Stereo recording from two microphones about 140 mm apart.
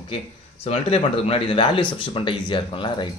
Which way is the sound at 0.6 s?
45° left (ahead or behind).